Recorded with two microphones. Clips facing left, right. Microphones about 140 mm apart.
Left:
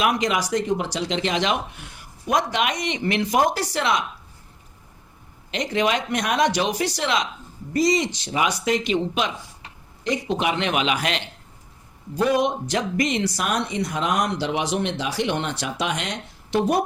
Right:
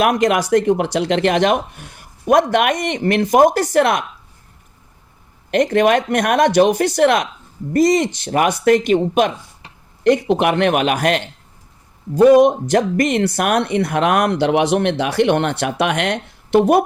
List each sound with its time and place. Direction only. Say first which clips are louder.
0.0 s speech: right 7 dB; 55° right (ahead or behind)
5.5 s speech: right 9 dB; 55° right (ahead or behind)
10.0 s speech: right 9 dB; 60° right (ahead or behind)